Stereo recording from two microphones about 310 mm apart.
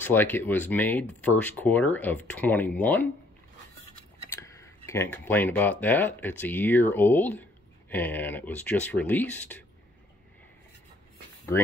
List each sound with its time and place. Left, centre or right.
0.0 s speech: centre
4.3 s speech: centre